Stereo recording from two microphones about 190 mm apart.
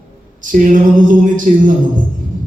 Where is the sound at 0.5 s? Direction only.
45° right (ahead or behind).